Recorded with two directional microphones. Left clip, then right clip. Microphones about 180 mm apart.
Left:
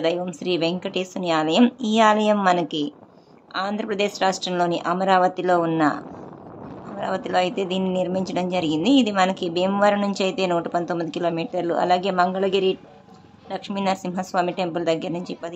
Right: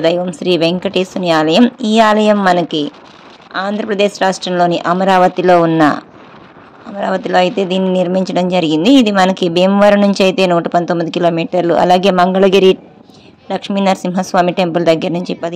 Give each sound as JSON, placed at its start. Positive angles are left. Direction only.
{"t": 0.0, "sound": "speech", "side_deg": -30}